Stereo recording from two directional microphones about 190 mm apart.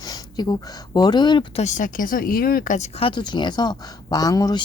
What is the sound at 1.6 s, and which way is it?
Speech, 40° left (ahead or behind).